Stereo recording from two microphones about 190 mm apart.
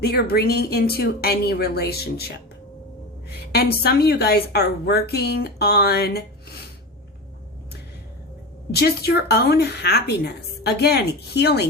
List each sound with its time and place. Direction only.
0.0 s a woman's voice: 55° left (ahead or behind)
8.7 s a woman's voice: 55° left (ahead or behind)